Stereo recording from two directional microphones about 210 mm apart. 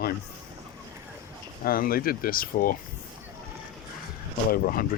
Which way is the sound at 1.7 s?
45° left (ahead or behind).